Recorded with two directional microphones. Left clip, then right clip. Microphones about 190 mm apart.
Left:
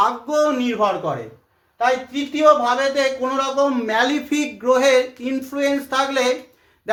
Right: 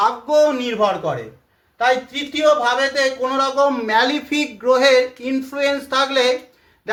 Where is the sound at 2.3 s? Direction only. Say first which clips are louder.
Left 1 dB; 10° left (ahead or behind).